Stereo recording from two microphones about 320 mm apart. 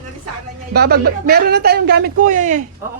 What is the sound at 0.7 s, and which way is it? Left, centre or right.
Speech, right.